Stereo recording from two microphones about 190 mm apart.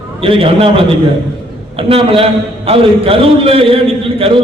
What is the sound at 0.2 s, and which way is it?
Speech, 30° right (ahead or behind).